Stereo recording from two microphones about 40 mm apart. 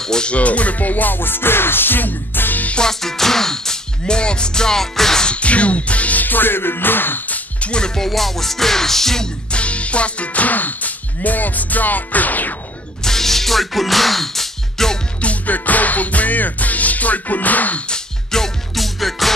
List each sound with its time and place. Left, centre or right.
0.0 s speech: centre
0.3 s music: left
2.8 s music: centre
4.0 s music: left
5.2 s music: left
7.2 s music: left
7.7 s music: centre
8.1 s music: centre
9.5 s music: left
13.0 s music: centre
15.2 s music: left
17.8 s music: centre
18.8 s music: centre